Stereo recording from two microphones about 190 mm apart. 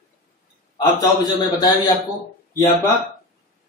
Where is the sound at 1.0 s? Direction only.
20° left (ahead or behind).